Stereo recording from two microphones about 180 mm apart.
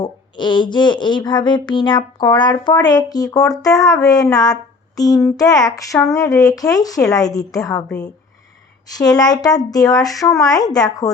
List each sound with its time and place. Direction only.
0.0 s speech: 25° left (ahead or behind)
9.0 s speech: 20° left (ahead or behind)